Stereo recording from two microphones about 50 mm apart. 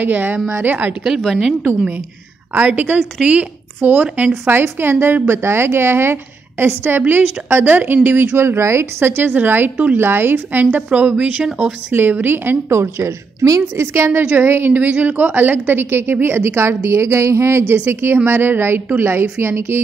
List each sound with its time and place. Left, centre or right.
0.0 s a woman's voice: right
2.5 s a woman's voice: right
4.5 s a woman's voice: right
8.4 s a woman's voice: right
9.0 s a woman's voice: right
10.9 s a woman's voice: right
11.9 s a woman's voice: right
12.7 s a woman's voice: right
14.3 s a woman's voice: right
14.8 s a woman's voice: right
17.8 s a woman's voice: right